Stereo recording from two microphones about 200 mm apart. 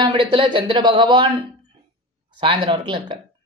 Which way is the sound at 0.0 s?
25° right (ahead or behind).